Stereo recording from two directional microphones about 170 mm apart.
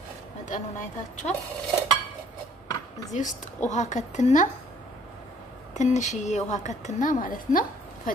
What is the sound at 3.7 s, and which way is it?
Speech, 45° left (ahead or behind).